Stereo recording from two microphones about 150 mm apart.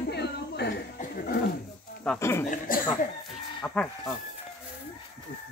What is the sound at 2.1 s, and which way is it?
Speech, 15° left (ahead or behind).